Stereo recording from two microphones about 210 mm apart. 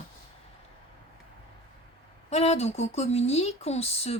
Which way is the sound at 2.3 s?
30° left (ahead or behind).